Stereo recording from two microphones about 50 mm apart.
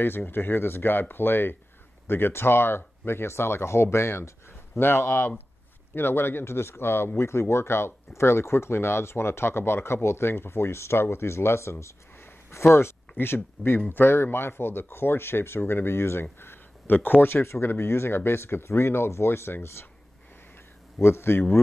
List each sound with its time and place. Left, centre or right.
0.0 s speech: left
13.1 s speech: left
21.0 s speech: left